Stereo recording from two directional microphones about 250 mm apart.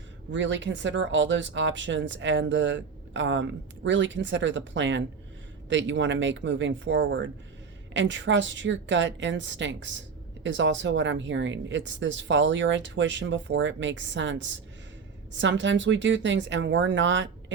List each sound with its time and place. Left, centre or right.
0.3 s speech: right